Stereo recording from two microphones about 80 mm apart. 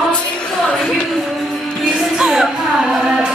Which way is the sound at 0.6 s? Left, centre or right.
Centre.